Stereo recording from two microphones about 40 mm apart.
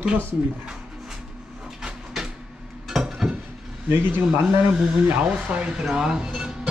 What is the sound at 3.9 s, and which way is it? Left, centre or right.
Speech, right.